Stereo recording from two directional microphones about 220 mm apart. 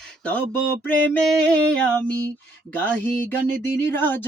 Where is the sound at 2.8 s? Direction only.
10° left (ahead or behind).